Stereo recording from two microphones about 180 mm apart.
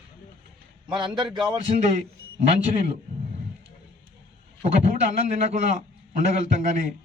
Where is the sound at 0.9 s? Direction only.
25° right (ahead or behind).